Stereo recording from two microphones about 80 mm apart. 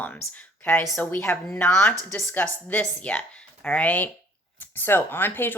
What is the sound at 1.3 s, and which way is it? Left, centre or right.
Speech, left.